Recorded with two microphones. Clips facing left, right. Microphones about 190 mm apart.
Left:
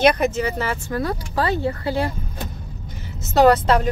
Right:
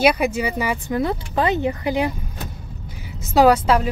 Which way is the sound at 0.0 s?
10° right (ahead or behind).